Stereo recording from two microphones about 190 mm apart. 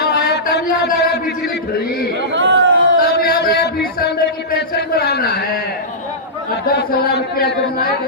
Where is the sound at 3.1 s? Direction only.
55° left (ahead or behind).